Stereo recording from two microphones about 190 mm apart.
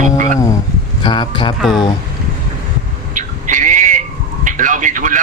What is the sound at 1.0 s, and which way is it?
Speech, 25° left (ahead or behind).